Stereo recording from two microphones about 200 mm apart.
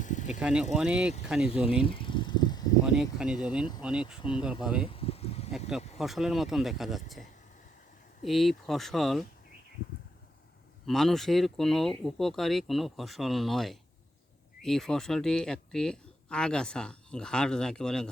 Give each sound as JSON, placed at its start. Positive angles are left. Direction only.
{"t": 0.0, "sound": "vehicle", "side_deg": 40}
{"t": 0.3, "sound": "speech", "side_deg": -5}
{"t": 1.8, "sound": "vehicle", "side_deg": 25}
{"t": 2.8, "sound": "speech", "side_deg": -5}
{"t": 4.9, "sound": "a sound", "side_deg": 30}
{"t": 5.5, "sound": "speech", "side_deg": 0}
{"t": 10.8, "sound": "speech", "side_deg": 0}